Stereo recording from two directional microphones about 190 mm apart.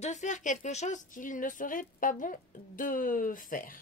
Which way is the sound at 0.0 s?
40° left (ahead or behind).